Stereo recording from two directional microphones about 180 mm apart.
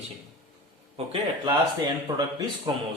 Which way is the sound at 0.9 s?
30° right (ahead or behind).